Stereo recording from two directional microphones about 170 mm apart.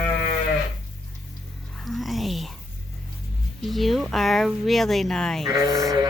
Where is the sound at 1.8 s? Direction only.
Centre (ahead or behind).